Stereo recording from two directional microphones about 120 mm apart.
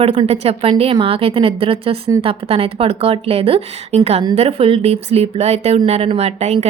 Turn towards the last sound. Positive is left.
turn(degrees=-60)  # may be behind; listen again after turning